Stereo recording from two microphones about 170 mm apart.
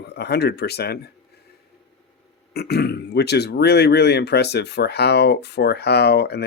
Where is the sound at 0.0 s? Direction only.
75° left (ahead or behind).